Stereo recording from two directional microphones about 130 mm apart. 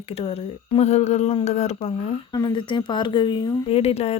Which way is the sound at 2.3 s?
35° left (ahead or behind).